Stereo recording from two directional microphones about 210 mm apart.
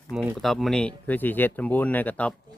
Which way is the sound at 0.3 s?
Centre (ahead or behind).